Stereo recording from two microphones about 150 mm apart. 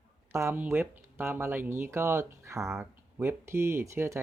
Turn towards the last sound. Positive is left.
turn(degrees=-20)  # may be behind; listen again after turning